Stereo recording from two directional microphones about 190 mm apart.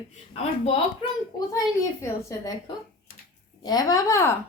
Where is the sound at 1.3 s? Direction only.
20° left (ahead or behind).